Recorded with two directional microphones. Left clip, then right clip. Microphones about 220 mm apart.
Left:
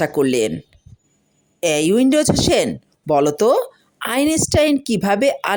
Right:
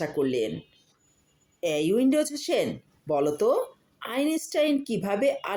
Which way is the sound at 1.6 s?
50° left (ahead or behind).